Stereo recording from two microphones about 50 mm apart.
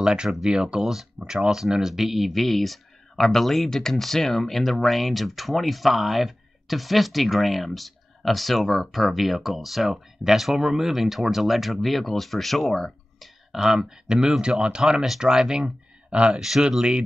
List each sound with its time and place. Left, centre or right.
0.0 s speech: centre
13.5 s speech: centre
16.3 s speech: centre